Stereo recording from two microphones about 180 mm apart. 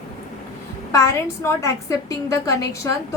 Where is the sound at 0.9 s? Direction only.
15° left (ahead or behind).